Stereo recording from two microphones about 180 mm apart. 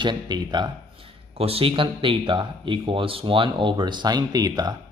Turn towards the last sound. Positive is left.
turn(degrees=-20)  # may be behind; listen again after turning